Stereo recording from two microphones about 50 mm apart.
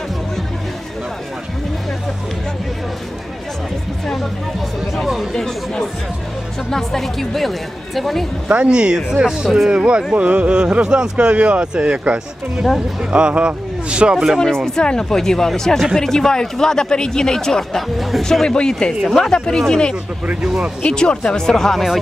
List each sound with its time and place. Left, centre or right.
4.0 s music: centre
5.0 s chatter: centre
5.3 s chatter: centre
6.7 s speech: centre
8.4 s speech: right
14.8 s speech: centre
18.2 s speech: centre
20.8 s speech: centre